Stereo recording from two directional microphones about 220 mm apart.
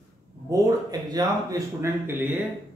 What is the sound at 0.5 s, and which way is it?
Speech, 15° right (ahead or behind).